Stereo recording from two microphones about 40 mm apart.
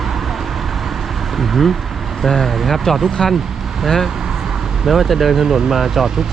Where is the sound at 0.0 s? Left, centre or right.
Centre.